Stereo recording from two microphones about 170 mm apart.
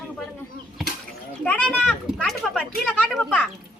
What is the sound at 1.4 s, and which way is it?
A child's voice, 10° left (ahead or behind).